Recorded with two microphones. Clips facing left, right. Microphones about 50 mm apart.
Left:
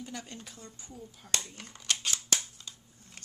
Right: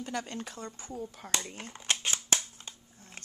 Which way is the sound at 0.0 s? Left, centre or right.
Right.